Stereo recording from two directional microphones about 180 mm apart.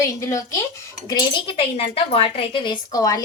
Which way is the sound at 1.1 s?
30° left (ahead or behind).